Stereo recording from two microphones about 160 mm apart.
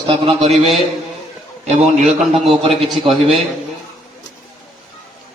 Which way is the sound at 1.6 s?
45° right (ahead or behind).